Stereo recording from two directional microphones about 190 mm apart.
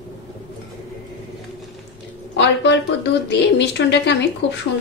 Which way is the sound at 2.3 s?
65° left (ahead or behind).